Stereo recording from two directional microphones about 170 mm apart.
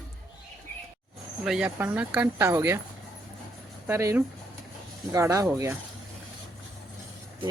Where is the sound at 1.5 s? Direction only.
5° right (ahead or behind).